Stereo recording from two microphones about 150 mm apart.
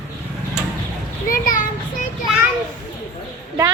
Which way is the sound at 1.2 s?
65° left (ahead or behind).